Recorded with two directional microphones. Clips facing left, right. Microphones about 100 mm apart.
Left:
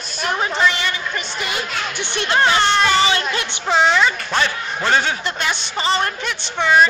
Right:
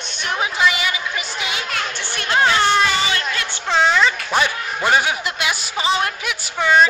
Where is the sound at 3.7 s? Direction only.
Centre (ahead or behind).